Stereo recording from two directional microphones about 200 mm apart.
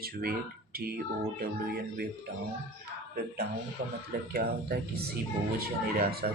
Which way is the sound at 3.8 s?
45° right (ahead or behind).